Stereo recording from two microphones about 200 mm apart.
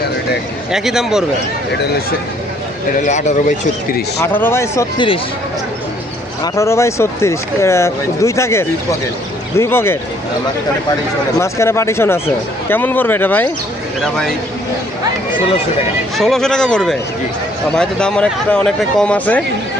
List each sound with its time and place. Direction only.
0.7 s speech: 5° right (ahead or behind)
2.9 s a man's voice: 35° left (ahead or behind)
4.2 s speech: 10° left (ahead or behind)
4.9 s speech: 25° left (ahead or behind)
6.4 s speech: 15° left (ahead or behind)
11.3 s speech: 15° left (ahead or behind)
16.1 s speech: centre (ahead or behind)